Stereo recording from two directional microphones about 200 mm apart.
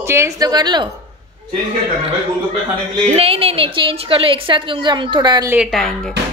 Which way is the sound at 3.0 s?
30° right (ahead or behind).